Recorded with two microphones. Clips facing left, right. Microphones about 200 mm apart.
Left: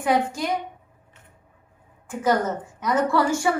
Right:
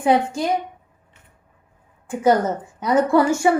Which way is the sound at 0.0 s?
30° right (ahead or behind).